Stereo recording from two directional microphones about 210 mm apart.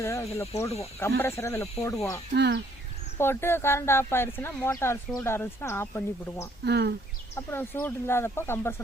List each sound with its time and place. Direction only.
0.0 s speech: 15° left (ahead or behind)
2.3 s speech: 55° right (ahead or behind)
3.2 s speech: 10° left (ahead or behind)
6.7 s speech: 50° right (ahead or behind)
7.3 s speech: 10° left (ahead or behind)